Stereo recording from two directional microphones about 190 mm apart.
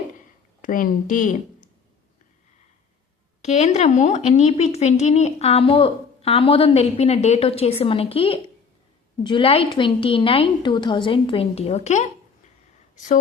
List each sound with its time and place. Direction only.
0.6 s speech: 45° left (ahead or behind)
3.4 s a woman's voice: 35° left (ahead or behind)